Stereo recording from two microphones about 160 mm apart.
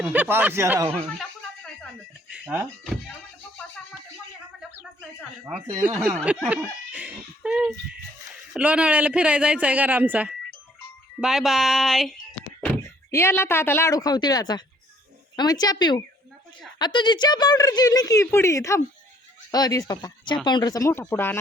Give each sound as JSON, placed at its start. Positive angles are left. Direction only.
{"t": 0.0, "sound": "speech", "side_deg": -10}
{"t": 1.2, "sound": "a sound", "side_deg": 5}
{"t": 2.3, "sound": "music", "side_deg": -10}
{"t": 5.5, "sound": "speech", "side_deg": -5}
{"t": 13.1, "sound": "speech", "side_deg": 15}